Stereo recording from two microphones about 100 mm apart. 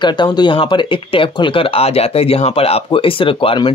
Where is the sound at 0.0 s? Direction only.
50° left (ahead or behind).